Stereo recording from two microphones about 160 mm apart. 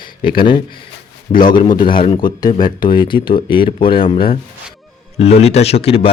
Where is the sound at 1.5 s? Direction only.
25° left (ahead or behind).